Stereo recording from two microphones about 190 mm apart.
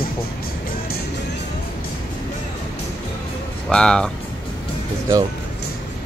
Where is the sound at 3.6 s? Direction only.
5° left (ahead or behind).